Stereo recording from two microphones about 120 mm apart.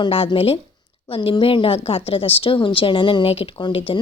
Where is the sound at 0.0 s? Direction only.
45° left (ahead or behind).